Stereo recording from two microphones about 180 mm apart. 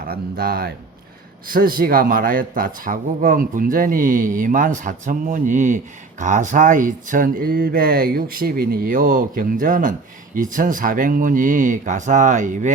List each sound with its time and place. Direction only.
0.1 s speech: 60° right (ahead or behind)